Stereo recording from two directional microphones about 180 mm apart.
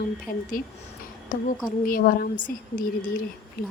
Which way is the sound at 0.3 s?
50° left (ahead or behind).